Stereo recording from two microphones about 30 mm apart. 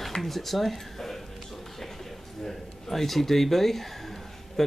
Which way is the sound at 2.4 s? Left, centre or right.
Centre.